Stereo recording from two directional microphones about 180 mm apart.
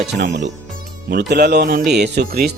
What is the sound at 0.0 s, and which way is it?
Speech, 70° right (ahead or behind).